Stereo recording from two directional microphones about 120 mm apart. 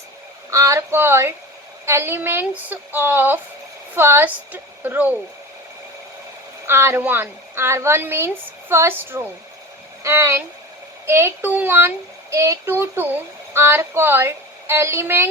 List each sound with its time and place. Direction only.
0.5 s a child's voice: 25° right (ahead or behind)
6.7 s a child's voice: 20° right (ahead or behind)